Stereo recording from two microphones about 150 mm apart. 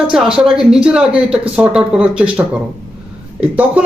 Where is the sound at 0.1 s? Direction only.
5° right (ahead or behind).